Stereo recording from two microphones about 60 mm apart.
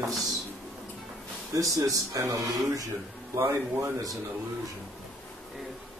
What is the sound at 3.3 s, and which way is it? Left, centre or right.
Speech, right.